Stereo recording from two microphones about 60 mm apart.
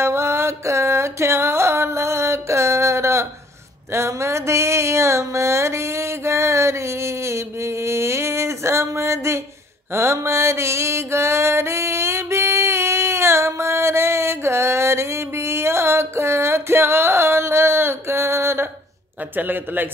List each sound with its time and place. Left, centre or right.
0.0 s music: right
3.9 s a sound: right
9.9 s music: right
19.3 s a man's voice: right